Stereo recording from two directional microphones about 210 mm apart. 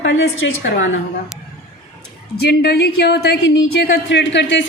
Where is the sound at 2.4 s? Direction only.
50° left (ahead or behind).